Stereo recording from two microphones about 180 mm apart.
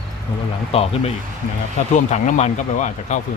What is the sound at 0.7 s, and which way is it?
Speech, 35° left (ahead or behind).